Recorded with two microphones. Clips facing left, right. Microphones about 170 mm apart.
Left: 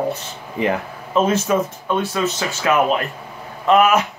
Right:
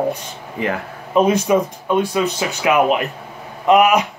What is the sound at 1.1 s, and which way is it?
Speech, 15° right (ahead or behind).